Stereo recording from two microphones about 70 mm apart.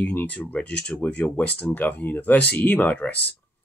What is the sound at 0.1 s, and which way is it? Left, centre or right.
Speech, left.